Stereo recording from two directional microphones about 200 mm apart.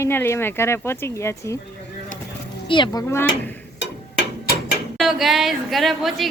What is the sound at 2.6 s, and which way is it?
Speech, 25° left (ahead or behind).